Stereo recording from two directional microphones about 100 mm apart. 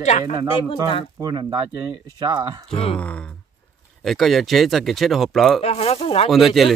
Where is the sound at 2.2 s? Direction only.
55° right (ahead or behind).